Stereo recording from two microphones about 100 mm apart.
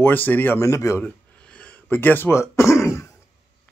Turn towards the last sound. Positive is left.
turn(degrees=30)  # may be behind; listen again after turning